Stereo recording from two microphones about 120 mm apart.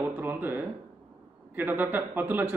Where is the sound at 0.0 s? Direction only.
15° right (ahead or behind).